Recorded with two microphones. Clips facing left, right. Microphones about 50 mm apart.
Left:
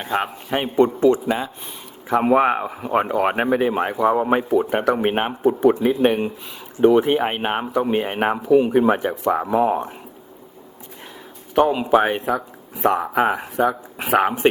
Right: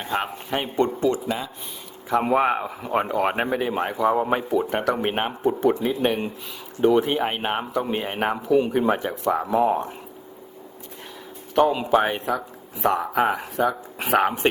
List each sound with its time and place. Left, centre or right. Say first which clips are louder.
0.0 s a man's voice: left 3 dB; centre
2.1 s speech: left 4 dB; centre
11.5 s speech: left 3 dB; centre